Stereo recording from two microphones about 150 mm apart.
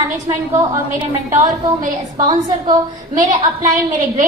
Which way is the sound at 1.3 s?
55° right (ahead or behind).